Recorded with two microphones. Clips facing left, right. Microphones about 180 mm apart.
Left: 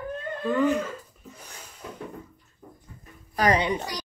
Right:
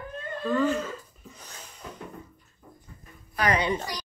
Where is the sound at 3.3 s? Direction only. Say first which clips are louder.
Left 3 dB; 40° left (ahead or behind).